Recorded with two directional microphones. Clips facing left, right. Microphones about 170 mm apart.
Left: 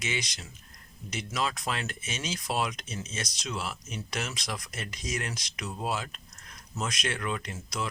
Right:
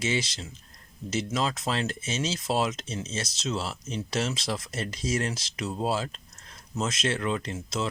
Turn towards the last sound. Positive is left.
turn(degrees=-25)  # may be behind; listen again after turning